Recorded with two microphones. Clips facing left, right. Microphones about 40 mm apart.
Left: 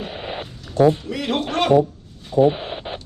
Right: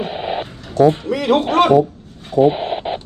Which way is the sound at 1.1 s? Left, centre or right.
Centre.